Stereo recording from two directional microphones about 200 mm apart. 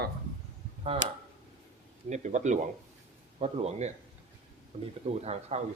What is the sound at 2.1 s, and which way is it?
A man's voice, 35° right (ahead or behind).